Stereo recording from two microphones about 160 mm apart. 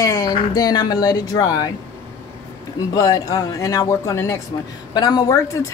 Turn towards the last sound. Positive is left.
turn(degrees=20)  # may be behind; listen again after turning